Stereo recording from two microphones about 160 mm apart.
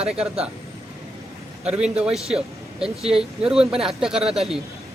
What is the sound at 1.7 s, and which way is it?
Speech, 5° right (ahead or behind).